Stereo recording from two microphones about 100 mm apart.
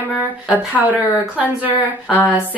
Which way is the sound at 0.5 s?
15° right (ahead or behind).